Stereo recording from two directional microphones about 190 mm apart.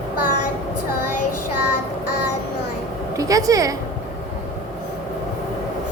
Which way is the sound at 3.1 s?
15° right (ahead or behind).